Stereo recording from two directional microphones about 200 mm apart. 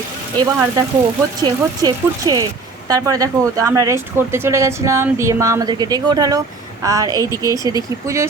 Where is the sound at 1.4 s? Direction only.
20° right (ahead or behind).